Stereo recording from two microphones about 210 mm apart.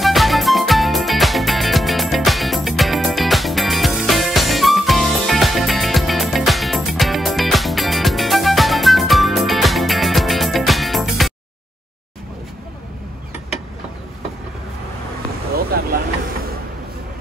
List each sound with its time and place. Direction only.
0.0 s music: centre (ahead or behind)
15.5 s vehicle: 45° right (ahead or behind)